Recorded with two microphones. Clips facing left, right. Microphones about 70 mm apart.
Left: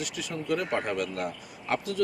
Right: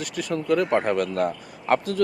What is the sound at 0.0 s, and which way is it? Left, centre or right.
Speech, right.